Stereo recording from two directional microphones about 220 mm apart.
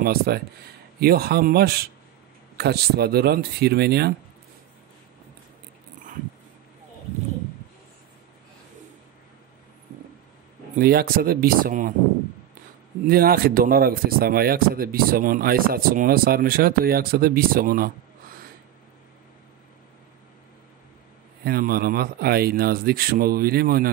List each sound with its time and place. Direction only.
0.0 s speech: 45° right (ahead or behind)
10.8 s speech: 40° right (ahead or behind)
13.0 s speech: 45° right (ahead or behind)
21.5 s speech: 45° right (ahead or behind)